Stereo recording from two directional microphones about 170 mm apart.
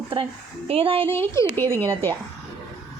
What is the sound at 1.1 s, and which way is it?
Speech, 15° left (ahead or behind).